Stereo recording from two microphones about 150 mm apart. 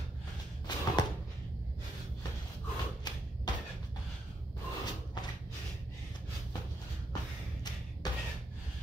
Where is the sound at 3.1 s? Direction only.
30° left (ahead or behind).